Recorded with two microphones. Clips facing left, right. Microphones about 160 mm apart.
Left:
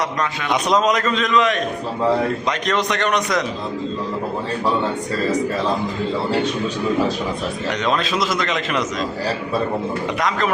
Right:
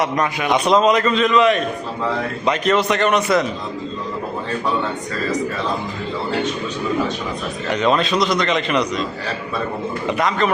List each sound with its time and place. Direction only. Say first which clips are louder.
0.0 s a man's voice: right 3 dB; 20° right (ahead or behind)
0.5 s a man's voice: right 3 dB; centre (ahead or behind)
7.7 s a man's voice: right 4 dB; centre (ahead or behind)
10.2 s a man's voice: right 3 dB; centre (ahead or behind)